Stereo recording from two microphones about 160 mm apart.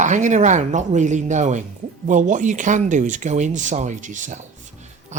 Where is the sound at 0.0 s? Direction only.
50° right (ahead or behind).